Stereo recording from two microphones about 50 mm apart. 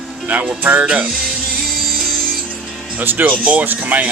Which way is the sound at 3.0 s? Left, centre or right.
Right.